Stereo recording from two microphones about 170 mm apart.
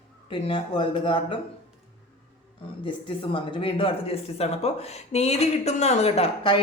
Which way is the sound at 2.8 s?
30° left (ahead or behind).